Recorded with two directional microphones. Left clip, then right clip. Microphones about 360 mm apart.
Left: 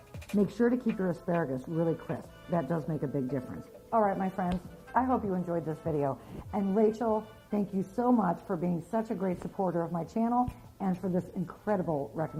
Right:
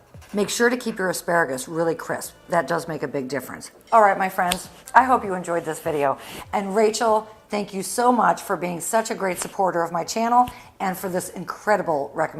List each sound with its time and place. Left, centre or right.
0.3 s speech: centre
7.1 s a woman's voice: centre